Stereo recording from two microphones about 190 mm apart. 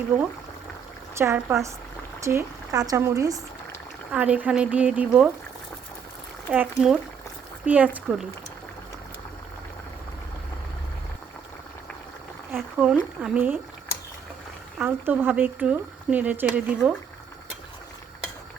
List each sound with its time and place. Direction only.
1.2 s speech: 15° right (ahead or behind)
6.5 s speech: 5° right (ahead or behind)
12.5 s speech: 10° right (ahead or behind)
14.8 s speech: 10° right (ahead or behind)